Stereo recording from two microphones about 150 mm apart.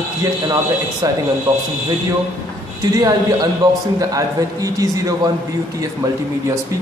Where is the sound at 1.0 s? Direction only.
25° right (ahead or behind).